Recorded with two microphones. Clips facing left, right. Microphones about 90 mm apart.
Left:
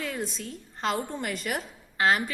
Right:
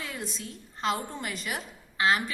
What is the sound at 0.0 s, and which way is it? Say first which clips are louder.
A woman's voice: left 4 dB; 50° left (ahead or behind).